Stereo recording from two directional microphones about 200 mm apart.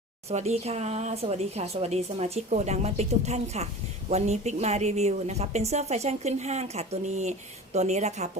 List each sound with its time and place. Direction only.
0.3 s a woman's voice: 30° right (ahead or behind)